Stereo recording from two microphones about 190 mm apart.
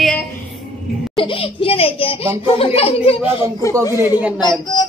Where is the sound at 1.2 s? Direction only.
25° left (ahead or behind).